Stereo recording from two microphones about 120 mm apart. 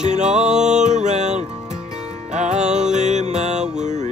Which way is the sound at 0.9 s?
75° right (ahead or behind).